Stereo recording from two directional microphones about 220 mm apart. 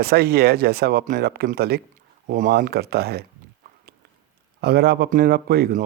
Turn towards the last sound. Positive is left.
turn(degrees=-45)  # may be behind; listen again after turning